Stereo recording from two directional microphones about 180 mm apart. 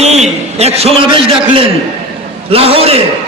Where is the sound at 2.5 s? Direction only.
30° right (ahead or behind).